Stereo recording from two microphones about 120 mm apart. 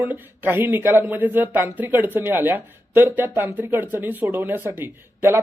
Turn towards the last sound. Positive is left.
turn(degrees=-20)  # may be behind; listen again after turning